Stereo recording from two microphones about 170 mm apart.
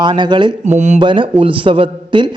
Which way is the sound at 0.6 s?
40° right (ahead or behind).